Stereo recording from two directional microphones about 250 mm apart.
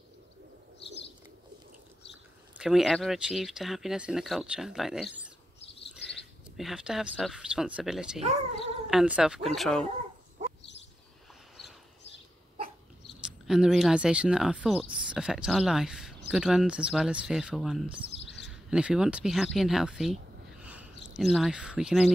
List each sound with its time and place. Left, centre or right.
2.5 s speech: centre
13.2 s speech: centre
18.2 s chirp: left
18.5 s speech: centre
20.6 s a sound: centre
21.1 s speech: centre